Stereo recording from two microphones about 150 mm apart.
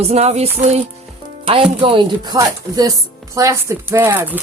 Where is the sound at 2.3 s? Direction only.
25° right (ahead or behind).